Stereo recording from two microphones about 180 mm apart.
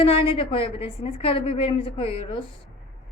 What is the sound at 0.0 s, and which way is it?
A woman's voice, 30° left (ahead or behind).